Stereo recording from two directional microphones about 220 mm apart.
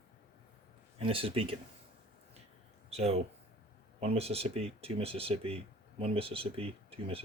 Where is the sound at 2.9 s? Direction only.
30° right (ahead or behind).